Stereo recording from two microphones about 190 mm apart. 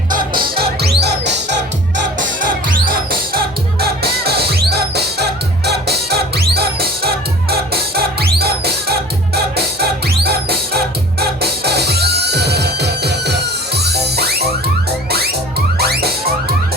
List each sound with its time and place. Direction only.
0.6 s music: 60° right (ahead or behind)
2.4 s music: 50° right (ahead or behind)
11.2 s music: 55° right (ahead or behind)
15.8 s music: 55° right (ahead or behind)